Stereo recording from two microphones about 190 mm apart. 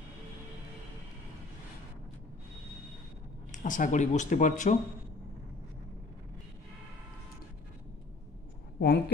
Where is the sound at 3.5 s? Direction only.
40° left (ahead or behind).